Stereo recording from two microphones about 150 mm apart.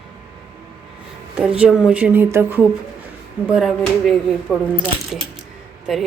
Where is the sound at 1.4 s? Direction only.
5° right (ahead or behind).